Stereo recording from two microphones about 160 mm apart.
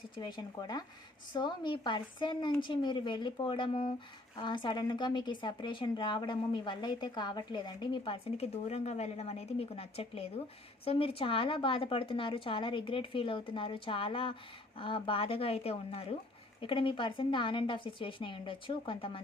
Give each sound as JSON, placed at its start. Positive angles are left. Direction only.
{"t": 0.2, "sound": "a woman's voice", "side_deg": 25}